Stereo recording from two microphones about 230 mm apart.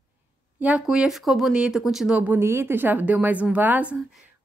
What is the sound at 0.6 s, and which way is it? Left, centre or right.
Speech, centre.